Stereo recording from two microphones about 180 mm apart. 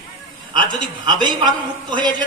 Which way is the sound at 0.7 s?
25° right (ahead or behind).